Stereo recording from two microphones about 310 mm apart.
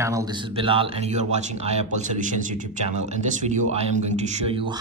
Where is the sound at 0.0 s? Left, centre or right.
Centre.